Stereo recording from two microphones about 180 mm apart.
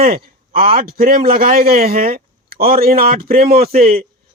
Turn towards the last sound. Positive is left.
turn(degrees=-60)  # may be behind; listen again after turning